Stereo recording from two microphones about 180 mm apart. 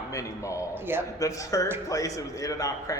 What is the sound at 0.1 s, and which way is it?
A man's voice, 15° left (ahead or behind).